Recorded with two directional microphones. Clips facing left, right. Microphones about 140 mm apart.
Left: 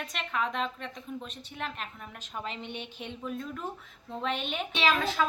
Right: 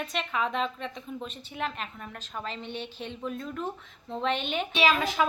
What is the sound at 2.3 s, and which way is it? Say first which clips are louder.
Speech: right 1 dB; 15° left (ahead or behind).